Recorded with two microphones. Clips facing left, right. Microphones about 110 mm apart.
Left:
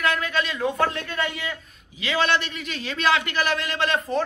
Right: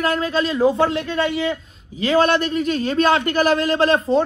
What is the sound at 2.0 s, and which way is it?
A man's voice, 45° right (ahead or behind).